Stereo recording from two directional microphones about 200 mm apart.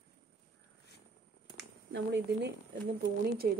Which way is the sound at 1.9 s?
65° right (ahead or behind).